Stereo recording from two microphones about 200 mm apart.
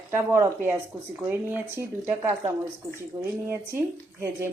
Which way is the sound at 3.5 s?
10° right (ahead or behind).